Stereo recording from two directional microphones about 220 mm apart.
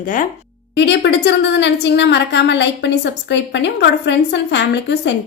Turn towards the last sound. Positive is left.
turn(degrees=55)  # may be behind; listen again after turning